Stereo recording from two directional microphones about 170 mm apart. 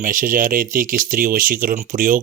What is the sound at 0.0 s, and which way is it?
Speech, 55° right (ahead or behind).